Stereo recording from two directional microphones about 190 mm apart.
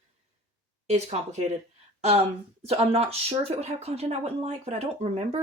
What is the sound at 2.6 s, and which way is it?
Speech, 30° right (ahead or behind).